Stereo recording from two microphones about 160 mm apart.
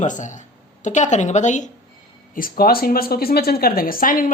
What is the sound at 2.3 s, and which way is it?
Speech, 65° left (ahead or behind).